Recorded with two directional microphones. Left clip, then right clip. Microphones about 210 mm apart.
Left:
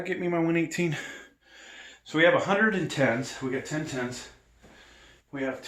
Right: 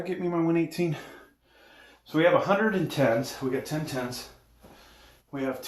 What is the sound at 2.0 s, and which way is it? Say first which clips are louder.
Speech: even; 35° left (ahead or behind).